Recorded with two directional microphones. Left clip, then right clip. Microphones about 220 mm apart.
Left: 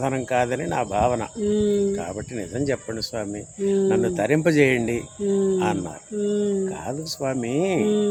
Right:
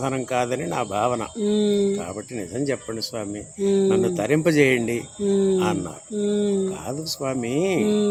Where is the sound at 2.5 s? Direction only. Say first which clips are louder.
Even; 10° left (ahead or behind).